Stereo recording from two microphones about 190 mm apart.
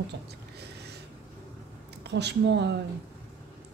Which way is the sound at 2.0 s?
60° right (ahead or behind).